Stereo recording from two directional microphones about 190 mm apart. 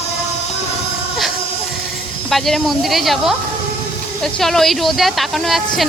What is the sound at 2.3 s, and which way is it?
A woman's voice, centre (ahead or behind).